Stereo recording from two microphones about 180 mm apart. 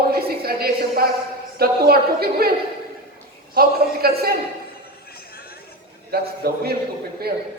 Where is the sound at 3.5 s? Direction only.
55° right (ahead or behind).